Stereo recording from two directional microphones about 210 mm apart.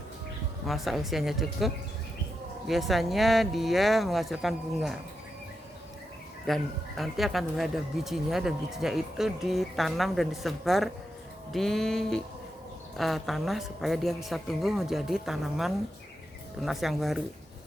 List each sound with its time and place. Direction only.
0.7 s speech: centre (ahead or behind)
6.5 s speech: centre (ahead or behind)